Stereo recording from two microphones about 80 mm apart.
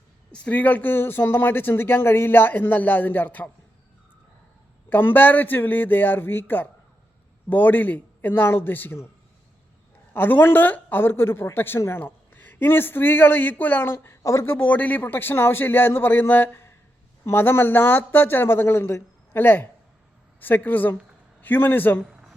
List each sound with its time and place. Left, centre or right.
0.3 s speech: centre
4.9 s a man's voice: left
10.1 s speech: left
22.0 s a sound: centre